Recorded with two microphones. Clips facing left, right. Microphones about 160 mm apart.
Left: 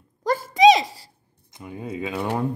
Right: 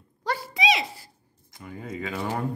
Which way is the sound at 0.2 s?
45° left (ahead or behind).